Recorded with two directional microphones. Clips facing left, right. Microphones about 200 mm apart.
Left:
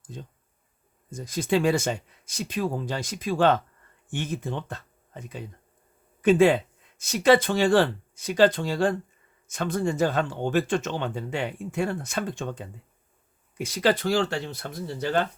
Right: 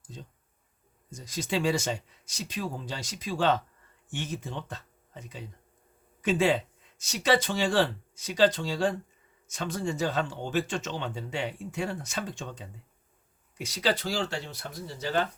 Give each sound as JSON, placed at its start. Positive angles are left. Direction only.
{"t": 1.1, "sound": "speech", "side_deg": 55}